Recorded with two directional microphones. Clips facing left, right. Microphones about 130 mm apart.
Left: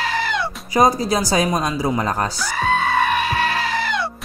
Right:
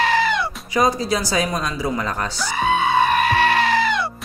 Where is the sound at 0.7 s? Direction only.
40° left (ahead or behind).